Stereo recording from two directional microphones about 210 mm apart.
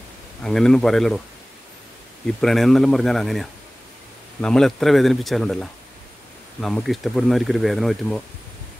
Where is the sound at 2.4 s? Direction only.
Centre (ahead or behind).